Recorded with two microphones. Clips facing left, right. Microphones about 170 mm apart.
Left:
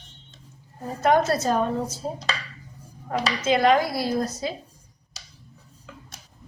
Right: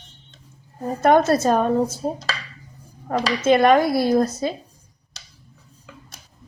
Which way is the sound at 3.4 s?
55° right (ahead or behind).